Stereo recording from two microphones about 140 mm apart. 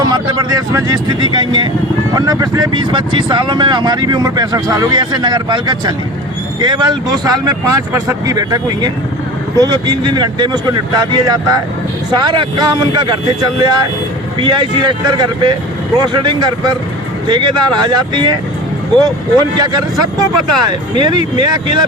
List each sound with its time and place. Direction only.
0.0 s speech: 30° right (ahead or behind)